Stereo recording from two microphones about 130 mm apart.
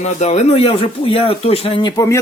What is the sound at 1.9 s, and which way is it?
Speech, 25° left (ahead or behind).